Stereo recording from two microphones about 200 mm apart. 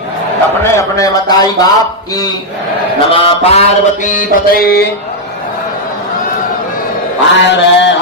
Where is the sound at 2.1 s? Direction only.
20° left (ahead or behind).